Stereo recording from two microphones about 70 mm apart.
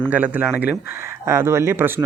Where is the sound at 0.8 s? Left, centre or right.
Right.